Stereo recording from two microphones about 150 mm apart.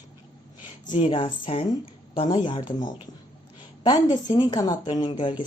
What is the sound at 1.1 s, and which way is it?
Speech, 40° left (ahead or behind).